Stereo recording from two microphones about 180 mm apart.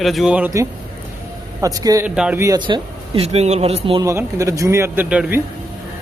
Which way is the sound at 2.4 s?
20° right (ahead or behind).